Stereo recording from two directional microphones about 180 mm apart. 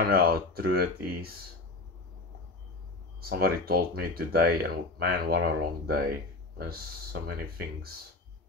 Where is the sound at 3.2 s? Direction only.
55° right (ahead or behind).